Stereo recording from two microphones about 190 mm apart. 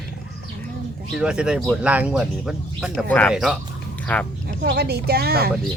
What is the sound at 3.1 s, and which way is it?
Speech, 5° left (ahead or behind).